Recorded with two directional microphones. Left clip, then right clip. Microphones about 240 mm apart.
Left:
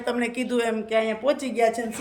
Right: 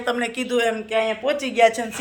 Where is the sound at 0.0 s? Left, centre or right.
Centre.